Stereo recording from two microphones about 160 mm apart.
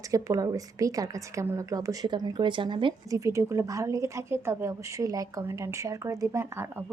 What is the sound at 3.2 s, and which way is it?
A woman's voice, 20° right (ahead or behind).